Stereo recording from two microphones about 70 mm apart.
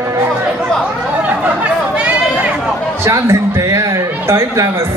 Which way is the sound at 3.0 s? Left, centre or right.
Right.